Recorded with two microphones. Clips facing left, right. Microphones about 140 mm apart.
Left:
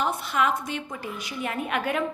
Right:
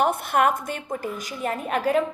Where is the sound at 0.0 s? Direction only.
55° right (ahead or behind).